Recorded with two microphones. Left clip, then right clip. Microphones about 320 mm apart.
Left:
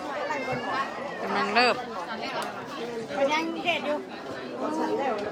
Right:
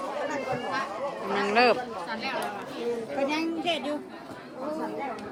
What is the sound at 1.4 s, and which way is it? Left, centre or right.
Speech, centre.